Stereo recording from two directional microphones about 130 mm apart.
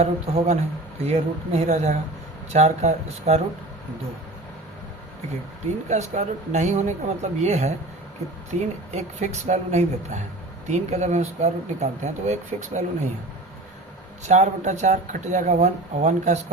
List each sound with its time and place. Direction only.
0.0 s a man's voice: 55° right (ahead or behind)
1.6 s speech: 70° right (ahead or behind)
2.5 s speech: 60° right (ahead or behind)
5.9 s speech: 60° right (ahead or behind)
14.3 s speech: 65° right (ahead or behind)